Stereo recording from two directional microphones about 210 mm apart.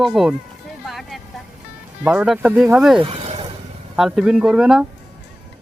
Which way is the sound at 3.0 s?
30° right (ahead or behind).